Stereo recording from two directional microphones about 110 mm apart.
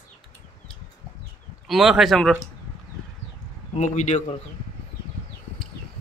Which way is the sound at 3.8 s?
90° left.